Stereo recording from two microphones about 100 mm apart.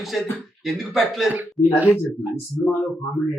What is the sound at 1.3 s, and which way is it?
Speech, 15° right (ahead or behind).